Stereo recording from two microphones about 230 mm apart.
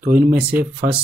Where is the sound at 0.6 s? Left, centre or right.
Right.